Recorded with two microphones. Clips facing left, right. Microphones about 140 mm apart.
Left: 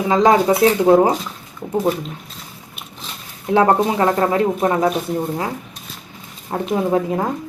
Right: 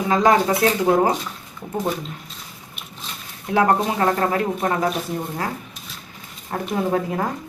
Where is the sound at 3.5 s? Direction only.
25° left (ahead or behind).